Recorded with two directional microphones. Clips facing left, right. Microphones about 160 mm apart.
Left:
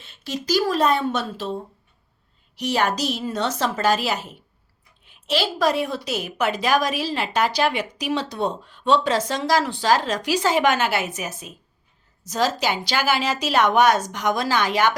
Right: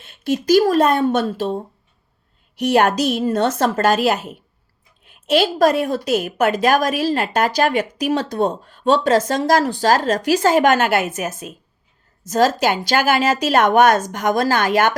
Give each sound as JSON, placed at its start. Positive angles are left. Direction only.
{"t": 0.0, "sound": "a woman's voice", "side_deg": -50}